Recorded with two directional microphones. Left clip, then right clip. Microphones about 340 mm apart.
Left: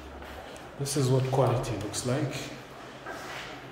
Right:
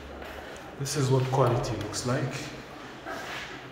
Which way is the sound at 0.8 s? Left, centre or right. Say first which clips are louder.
Even; centre.